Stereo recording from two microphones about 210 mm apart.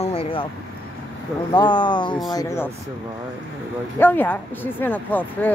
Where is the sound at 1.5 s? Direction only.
20° left (ahead or behind).